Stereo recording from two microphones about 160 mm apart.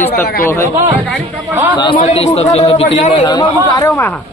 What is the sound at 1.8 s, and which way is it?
Speech, 30° left (ahead or behind).